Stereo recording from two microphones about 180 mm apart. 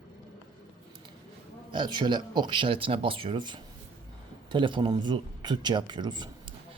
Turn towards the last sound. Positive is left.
turn(degrees=-25)  # may be behind; listen again after turning